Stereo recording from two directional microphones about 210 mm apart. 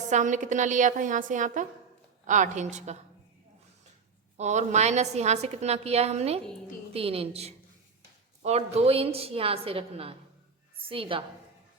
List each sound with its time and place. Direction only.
0.1 s a woman's voice: 35° right (ahead or behind)
4.4 s a woman's voice: 35° right (ahead or behind)